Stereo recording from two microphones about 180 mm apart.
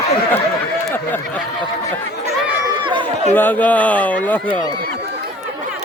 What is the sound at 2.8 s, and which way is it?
Chatter, 25° right (ahead or behind).